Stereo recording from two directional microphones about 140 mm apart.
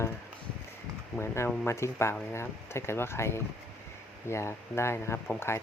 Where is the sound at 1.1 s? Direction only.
20° left (ahead or behind).